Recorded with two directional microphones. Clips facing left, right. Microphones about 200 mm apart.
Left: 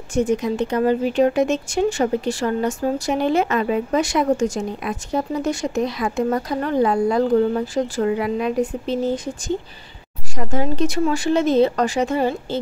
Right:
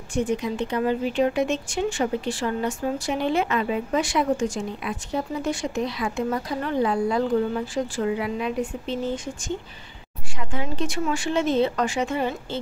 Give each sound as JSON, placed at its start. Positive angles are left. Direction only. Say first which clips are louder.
{"t": 0.1, "sound": "speech", "louder": "left 5 dB", "side_deg": 45}